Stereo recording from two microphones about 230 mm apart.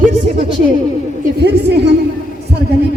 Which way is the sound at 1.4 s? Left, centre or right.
Right.